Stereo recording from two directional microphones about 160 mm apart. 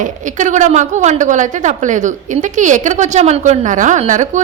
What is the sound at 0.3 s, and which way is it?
A woman's voice, 50° right (ahead or behind).